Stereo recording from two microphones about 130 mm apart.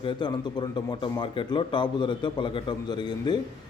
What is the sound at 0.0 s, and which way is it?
A man's voice, 35° left (ahead or behind).